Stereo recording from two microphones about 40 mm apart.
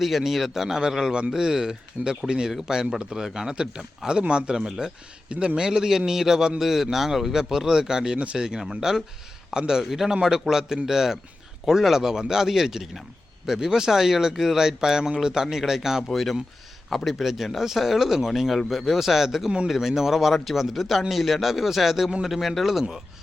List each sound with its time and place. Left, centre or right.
0.0 s speech: centre
16.1 s a man's voice: centre